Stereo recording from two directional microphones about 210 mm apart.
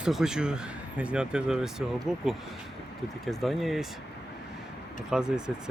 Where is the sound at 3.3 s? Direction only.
Centre (ahead or behind).